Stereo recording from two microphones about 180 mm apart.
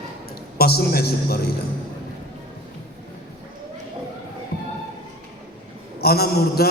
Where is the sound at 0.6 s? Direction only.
60° left (ahead or behind).